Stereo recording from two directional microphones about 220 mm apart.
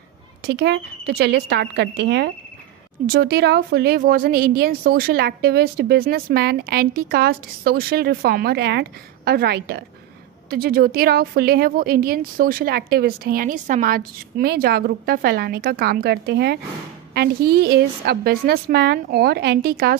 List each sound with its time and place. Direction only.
0.4 s a woman's voice: 50° right (ahead or behind)